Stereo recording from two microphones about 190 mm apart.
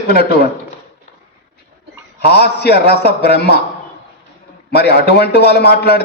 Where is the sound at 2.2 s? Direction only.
60° left (ahead or behind).